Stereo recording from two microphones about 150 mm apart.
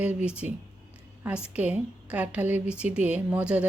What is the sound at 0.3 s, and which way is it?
A woman's voice, 10° right (ahead or behind).